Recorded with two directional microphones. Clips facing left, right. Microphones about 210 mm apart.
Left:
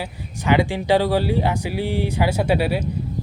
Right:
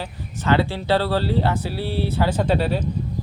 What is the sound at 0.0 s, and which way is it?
Speech, 15° left (ahead or behind).